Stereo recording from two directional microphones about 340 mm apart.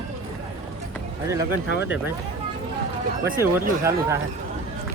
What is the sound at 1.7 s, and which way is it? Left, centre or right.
Speech, left.